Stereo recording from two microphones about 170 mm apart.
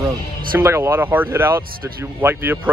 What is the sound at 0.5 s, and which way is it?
Speech, 15° right (ahead or behind).